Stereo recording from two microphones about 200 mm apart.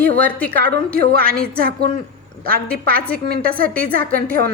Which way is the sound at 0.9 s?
50° right (ahead or behind).